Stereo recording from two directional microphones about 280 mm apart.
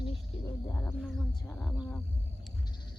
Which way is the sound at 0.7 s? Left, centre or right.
Centre.